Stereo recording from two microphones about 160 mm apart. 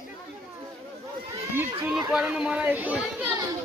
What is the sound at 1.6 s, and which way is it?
Speech, 15° right (ahead or behind).